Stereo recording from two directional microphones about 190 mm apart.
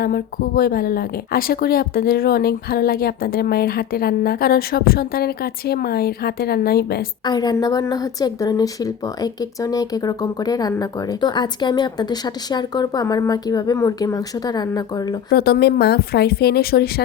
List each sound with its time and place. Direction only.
0.0 s speech: 50° left (ahead or behind)
7.3 s speech: 20° left (ahead or behind)
15.3 s speech: 55° left (ahead or behind)